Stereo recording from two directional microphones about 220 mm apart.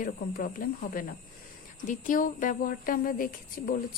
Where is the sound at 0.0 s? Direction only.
40° left (ahead or behind).